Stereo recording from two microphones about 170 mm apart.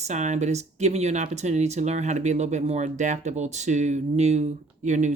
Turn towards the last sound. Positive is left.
turn(degrees=-45)  # may be behind; listen again after turning